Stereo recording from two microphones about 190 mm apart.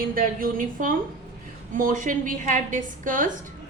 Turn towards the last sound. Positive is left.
turn(degrees=-45)  # may be behind; listen again after turning